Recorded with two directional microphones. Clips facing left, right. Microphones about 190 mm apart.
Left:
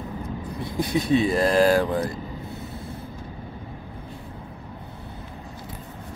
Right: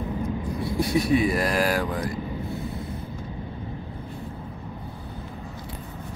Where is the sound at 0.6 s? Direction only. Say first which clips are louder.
Right 1 dB; 20° left (ahead or behind).